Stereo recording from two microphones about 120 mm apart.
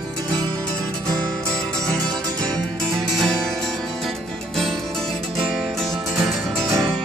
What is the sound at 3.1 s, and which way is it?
Music, 5° left (ahead or behind).